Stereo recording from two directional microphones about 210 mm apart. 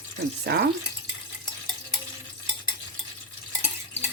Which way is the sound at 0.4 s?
50° right (ahead or behind).